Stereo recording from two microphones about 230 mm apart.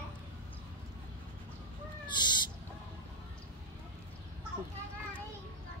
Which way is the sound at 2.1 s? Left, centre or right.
Centre.